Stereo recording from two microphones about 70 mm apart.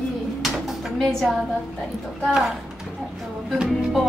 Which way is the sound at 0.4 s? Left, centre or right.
Centre.